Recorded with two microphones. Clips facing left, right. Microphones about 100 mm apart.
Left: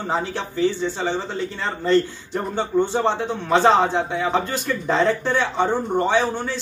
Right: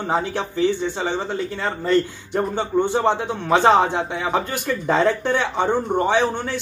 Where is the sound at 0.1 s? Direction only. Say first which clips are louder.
Right 2 dB; 15° right (ahead or behind).